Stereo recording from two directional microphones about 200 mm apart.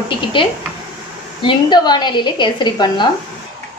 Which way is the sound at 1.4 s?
20° left (ahead or behind).